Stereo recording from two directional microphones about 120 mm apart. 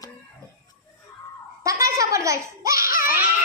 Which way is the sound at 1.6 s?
25° right (ahead or behind).